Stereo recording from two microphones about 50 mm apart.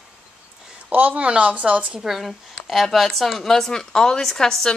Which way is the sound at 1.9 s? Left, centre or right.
Centre.